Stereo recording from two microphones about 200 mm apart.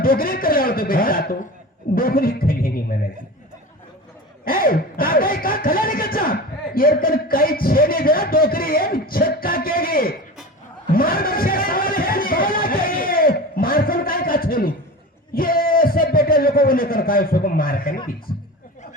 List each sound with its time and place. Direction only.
0.0 s speech: 45° left (ahead or behind)
4.4 s speech: 45° left (ahead or behind)
10.9 s a sound: 45° left (ahead or behind)
15.4 s a man's voice: 45° left (ahead or behind)